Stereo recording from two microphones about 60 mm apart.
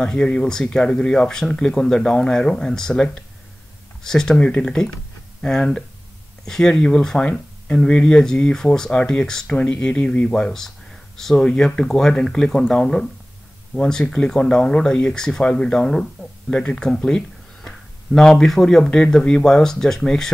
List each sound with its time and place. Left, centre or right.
0.0 s speech: centre
4.4 s speech: left